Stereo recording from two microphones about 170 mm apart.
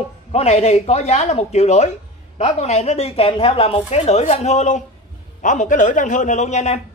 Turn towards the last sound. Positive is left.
turn(degrees=40)  # may be behind; listen again after turning